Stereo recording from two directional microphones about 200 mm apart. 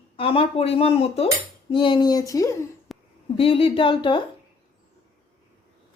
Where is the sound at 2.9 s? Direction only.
Centre (ahead or behind).